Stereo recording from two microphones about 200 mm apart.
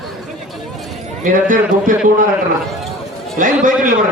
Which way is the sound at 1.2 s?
40° right (ahead or behind).